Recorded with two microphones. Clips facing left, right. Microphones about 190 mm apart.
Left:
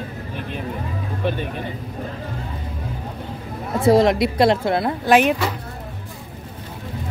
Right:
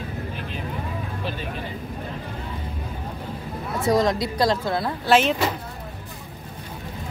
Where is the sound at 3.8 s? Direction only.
25° left (ahead or behind).